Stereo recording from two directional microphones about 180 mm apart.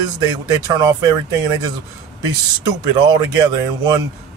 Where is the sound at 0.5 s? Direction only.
20° right (ahead or behind).